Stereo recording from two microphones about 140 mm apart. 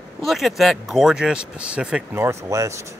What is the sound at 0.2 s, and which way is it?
Speech, centre (ahead or behind).